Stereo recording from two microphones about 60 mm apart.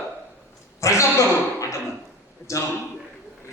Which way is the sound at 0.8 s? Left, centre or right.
Left.